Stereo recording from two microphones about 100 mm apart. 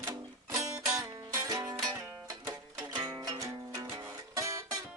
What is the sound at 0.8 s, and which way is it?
Music, 30° right (ahead or behind).